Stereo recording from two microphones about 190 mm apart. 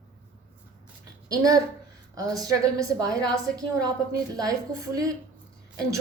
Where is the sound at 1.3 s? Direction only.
20° right (ahead or behind).